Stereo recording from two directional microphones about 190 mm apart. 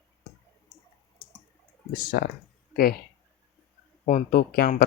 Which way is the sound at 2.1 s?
55° left (ahead or behind).